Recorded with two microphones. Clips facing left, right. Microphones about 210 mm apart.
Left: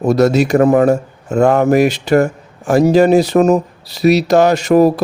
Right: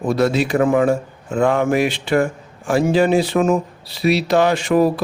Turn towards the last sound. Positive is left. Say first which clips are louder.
# left 5 dB
turn(degrees=40)  # may be behind; listen again after turning